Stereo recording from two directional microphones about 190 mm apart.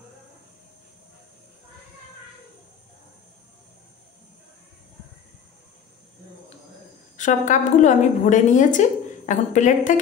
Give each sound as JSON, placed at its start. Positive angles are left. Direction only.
{"t": 7.2, "sound": "a woman's voice", "side_deg": 40}